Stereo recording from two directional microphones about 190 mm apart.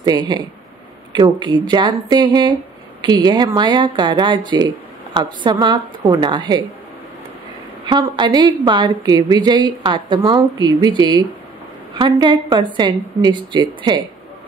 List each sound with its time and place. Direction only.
0.0 s a woman's voice: 20° right (ahead or behind)
7.8 s a woman's voice: 20° right (ahead or behind)